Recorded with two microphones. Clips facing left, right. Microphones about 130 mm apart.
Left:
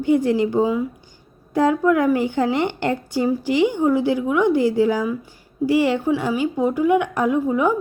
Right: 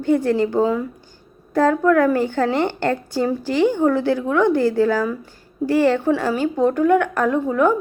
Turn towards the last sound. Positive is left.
turn(degrees=10)  # may be behind; listen again after turning